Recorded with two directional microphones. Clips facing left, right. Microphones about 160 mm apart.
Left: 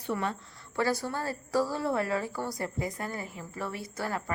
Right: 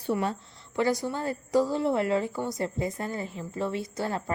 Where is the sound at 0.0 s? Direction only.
30° right (ahead or behind).